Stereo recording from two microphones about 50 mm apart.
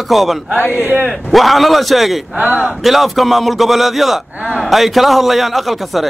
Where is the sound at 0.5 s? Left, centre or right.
Left.